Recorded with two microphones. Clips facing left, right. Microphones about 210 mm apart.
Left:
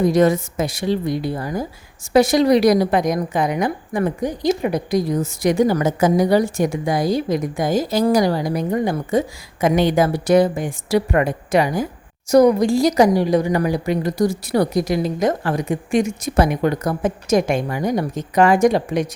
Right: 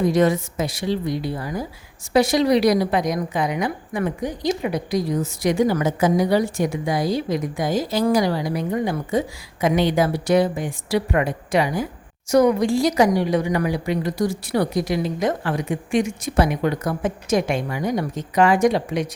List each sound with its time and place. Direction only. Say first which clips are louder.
0.0 s a woman's voice: left 3 dB; 40° left (ahead or behind)